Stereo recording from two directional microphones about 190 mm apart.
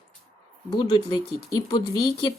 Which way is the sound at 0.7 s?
20° left (ahead or behind).